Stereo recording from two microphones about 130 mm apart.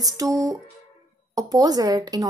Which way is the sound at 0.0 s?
25° right (ahead or behind).